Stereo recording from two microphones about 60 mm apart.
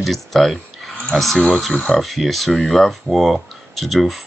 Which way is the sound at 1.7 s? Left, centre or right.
Left.